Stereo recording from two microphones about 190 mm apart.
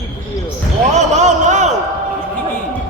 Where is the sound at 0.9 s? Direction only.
40° right (ahead or behind).